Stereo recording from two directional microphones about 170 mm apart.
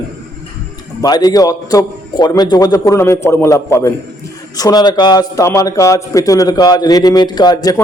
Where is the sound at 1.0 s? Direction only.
20° left (ahead or behind).